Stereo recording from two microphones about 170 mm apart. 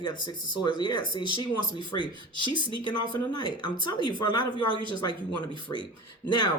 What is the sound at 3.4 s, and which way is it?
Speech, 25° left (ahead or behind).